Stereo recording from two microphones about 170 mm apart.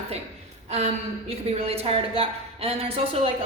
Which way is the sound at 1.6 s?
35° right (ahead or behind).